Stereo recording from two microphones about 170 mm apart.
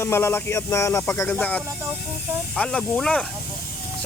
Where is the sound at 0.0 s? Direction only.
15° left (ahead or behind).